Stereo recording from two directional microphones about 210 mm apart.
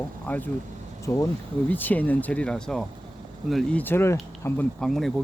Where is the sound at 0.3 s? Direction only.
10° left (ahead or behind).